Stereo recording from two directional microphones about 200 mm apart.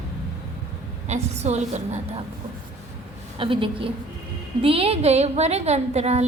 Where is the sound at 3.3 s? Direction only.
25° right (ahead or behind).